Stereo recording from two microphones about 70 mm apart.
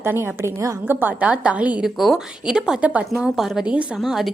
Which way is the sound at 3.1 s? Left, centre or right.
Centre.